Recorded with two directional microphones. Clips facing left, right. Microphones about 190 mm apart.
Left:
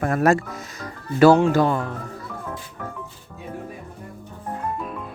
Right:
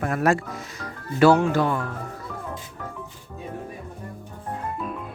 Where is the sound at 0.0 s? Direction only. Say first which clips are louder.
Left 3 dB; 40° left (ahead or behind).